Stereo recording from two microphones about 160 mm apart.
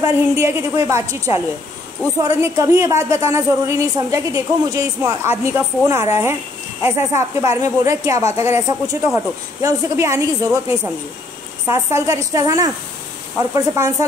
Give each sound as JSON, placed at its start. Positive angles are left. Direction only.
{"t": 0.0, "sound": "a woman's voice", "side_deg": -15}